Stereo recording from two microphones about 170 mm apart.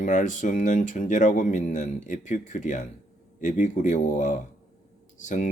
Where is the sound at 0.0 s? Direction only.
45° left (ahead or behind).